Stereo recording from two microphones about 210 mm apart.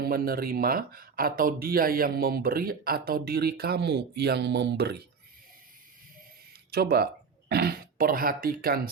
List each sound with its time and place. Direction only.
0.0 s speech: 45° right (ahead or behind)
6.7 s speech: 45° right (ahead or behind)